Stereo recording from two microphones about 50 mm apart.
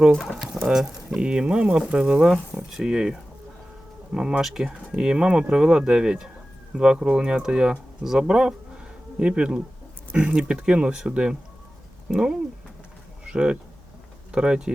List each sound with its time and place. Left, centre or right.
0.2 s speech: centre
1.2 s speech: centre